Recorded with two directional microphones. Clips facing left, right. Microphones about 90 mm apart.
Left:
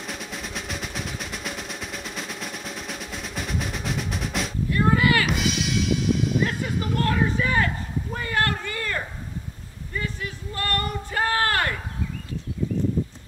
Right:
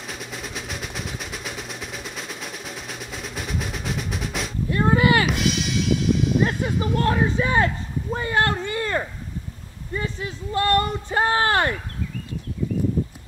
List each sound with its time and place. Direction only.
0.0 s music: centre (ahead or behind)
4.6 s a sound: 25° right (ahead or behind)
5.3 s music: centre (ahead or behind)
7.0 s speech: 25° right (ahead or behind)